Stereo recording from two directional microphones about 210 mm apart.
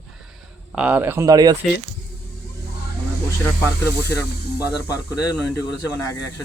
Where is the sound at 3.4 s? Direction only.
15° left (ahead or behind).